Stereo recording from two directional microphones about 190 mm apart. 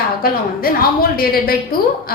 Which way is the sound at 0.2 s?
50° left (ahead or behind).